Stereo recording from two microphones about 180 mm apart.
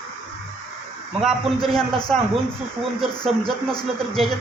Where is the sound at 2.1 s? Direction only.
5° left (ahead or behind).